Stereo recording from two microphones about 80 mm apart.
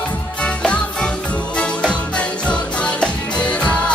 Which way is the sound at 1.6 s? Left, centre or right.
Centre.